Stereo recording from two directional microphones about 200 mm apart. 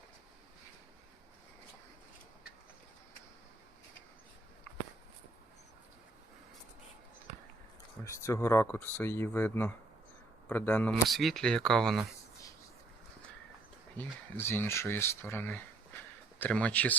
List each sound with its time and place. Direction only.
8.0 s speech: 15° left (ahead or behind)
13.9 s speech: 10° left (ahead or behind)